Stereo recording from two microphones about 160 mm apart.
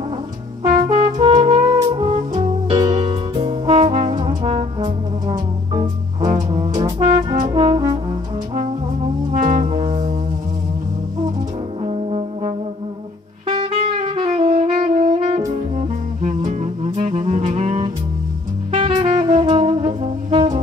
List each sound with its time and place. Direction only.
0.9 s music: 30° right (ahead or behind)
4.5 s brass instrument: 35° right (ahead or behind)
6.8 s brass instrument: 30° right (ahead or behind)
9.3 s brass instrument: 55° right (ahead or behind)
9.7 s brass instrument: 30° right (ahead or behind)
11.8 s brass instrument: 40° right (ahead or behind)
13.5 s saxophone: 35° right (ahead or behind)
16.4 s music: 40° right (ahead or behind)